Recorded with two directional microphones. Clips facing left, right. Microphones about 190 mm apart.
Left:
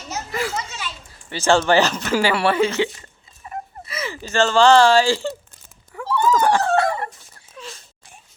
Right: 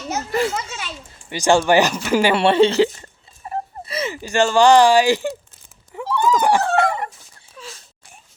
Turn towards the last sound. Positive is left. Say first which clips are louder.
# left 1 dB
turn(degrees=0)  # may be behind; listen again after turning